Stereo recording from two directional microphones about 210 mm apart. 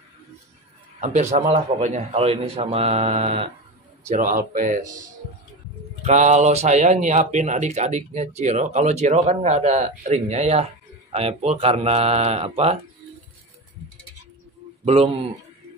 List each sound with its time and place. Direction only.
1.0 s a man's voice: 35° right (ahead or behind)
6.0 s speech: 35° right (ahead or behind)